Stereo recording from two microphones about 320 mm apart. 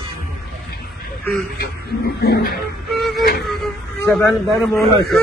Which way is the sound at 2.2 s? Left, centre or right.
Left.